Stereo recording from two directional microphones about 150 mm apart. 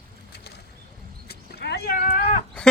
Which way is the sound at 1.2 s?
90° left.